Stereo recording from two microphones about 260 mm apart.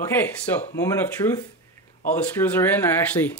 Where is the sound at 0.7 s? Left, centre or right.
Centre.